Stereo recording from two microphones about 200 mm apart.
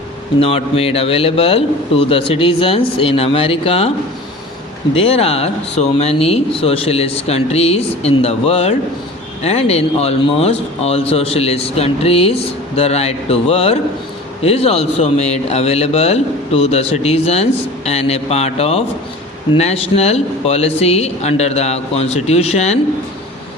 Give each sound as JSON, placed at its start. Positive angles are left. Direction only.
{"t": 0.3, "sound": "speech", "side_deg": 30}
{"t": 4.9, "sound": "a man's voice", "side_deg": 30}